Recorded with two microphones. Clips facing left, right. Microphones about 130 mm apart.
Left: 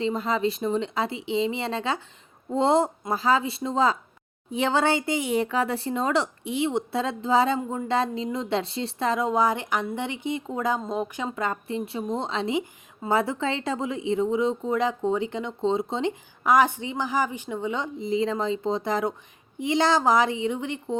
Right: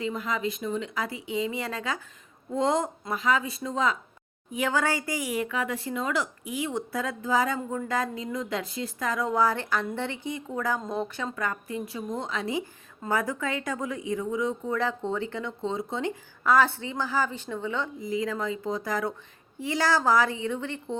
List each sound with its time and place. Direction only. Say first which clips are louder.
0.0 s speech: left 5 dB; 30° left (ahead or behind)